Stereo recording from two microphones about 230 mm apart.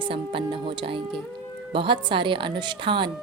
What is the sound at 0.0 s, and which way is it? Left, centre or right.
Speech, right.